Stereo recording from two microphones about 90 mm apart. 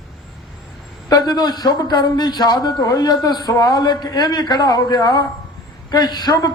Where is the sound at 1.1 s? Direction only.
45° left (ahead or behind).